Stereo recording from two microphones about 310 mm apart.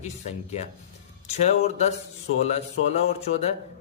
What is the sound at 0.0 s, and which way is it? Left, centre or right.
Speech, left.